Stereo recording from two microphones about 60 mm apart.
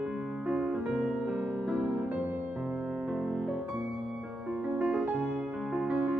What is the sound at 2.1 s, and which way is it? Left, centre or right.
Music, right.